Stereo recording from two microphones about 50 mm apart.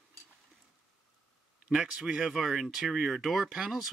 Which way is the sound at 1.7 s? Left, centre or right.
Centre.